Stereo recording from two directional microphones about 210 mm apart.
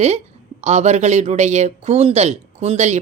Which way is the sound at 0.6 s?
30° right (ahead or behind).